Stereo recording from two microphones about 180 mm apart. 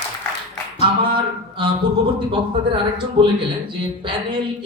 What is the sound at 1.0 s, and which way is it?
Speech, 25° right (ahead or behind).